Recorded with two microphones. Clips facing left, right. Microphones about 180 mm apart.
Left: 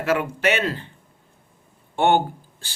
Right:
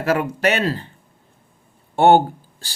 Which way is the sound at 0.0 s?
40° right (ahead or behind).